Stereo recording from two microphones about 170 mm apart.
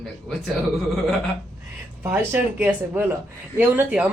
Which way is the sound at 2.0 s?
15° right (ahead or behind).